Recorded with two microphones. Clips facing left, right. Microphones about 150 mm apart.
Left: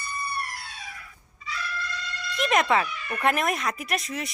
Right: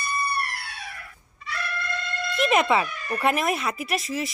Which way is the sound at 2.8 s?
40° right (ahead or behind).